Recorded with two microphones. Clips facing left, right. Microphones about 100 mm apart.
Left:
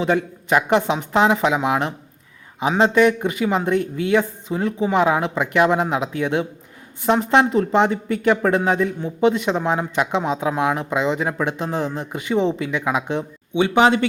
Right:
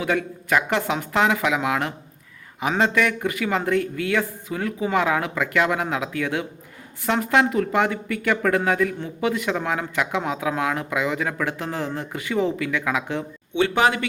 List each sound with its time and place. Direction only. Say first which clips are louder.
0.0 s a man's voice: left 4 dB; 25° left (ahead or behind)